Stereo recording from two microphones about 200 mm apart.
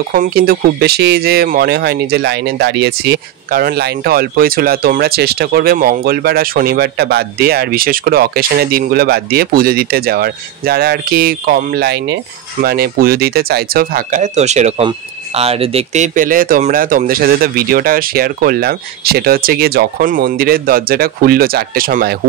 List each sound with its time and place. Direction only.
0.1 s speech: 45° right (ahead or behind)